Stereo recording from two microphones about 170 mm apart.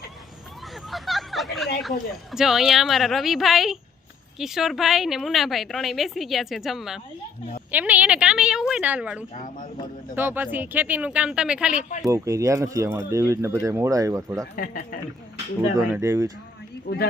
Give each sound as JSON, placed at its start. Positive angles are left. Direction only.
{"t": 0.9, "sound": "a sound", "side_deg": 0}
{"t": 1.8, "sound": "a woman's voice", "side_deg": 0}
{"t": 9.3, "sound": "speech", "side_deg": 50}
{"t": 10.2, "sound": "speech", "side_deg": -10}
{"t": 11.8, "sound": "speech", "side_deg": 50}
{"t": 12.0, "sound": "speech", "side_deg": -20}
{"t": 14.5, "sound": "speech", "side_deg": 60}
{"t": 15.9, "sound": "speech", "side_deg": -15}
{"t": 16.9, "sound": "speech", "side_deg": 65}